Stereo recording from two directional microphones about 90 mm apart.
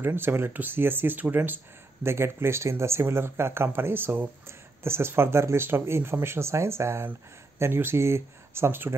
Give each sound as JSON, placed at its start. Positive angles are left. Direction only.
{"t": 0.0, "sound": "speech", "side_deg": -25}